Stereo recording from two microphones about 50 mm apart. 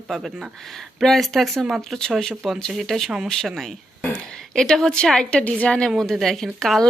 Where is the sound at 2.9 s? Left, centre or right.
Centre.